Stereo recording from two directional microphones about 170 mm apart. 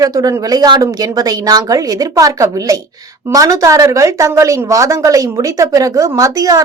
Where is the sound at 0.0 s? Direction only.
20° right (ahead or behind).